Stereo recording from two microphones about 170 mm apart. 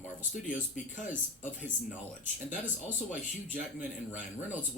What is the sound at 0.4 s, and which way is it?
Speech, 45° left (ahead or behind).